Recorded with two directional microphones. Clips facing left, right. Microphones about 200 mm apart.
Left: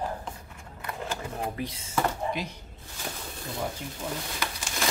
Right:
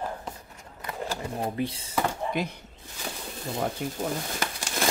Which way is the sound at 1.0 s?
30° right (ahead or behind).